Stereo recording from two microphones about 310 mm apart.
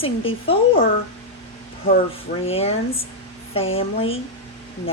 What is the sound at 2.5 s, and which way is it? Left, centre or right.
A woman's voice, centre.